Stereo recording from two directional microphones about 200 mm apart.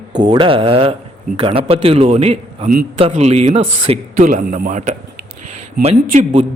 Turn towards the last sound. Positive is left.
turn(degrees=-30)  # may be behind; listen again after turning